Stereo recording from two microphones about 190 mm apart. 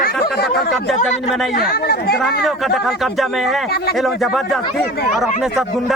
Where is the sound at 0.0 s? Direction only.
55° left (ahead or behind).